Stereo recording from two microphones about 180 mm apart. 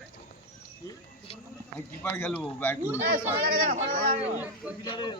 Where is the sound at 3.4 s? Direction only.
55° right (ahead or behind).